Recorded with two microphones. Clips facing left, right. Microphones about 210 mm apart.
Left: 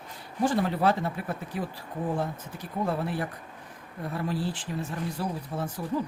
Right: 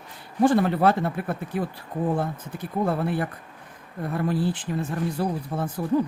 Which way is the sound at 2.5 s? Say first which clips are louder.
Right 4 dB; 55° right (ahead or behind).